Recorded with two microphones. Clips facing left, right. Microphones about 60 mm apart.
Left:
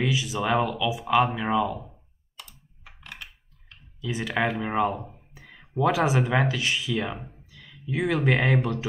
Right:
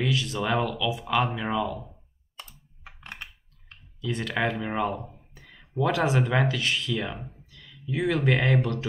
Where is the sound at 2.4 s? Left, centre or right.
Right.